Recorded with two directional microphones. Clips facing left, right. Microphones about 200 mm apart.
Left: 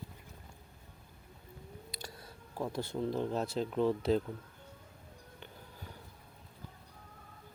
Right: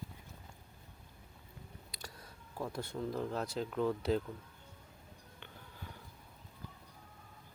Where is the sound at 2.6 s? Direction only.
25° left (ahead or behind).